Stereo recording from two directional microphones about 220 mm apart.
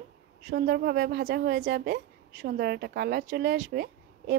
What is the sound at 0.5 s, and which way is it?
A woman's voice, 45° right (ahead or behind).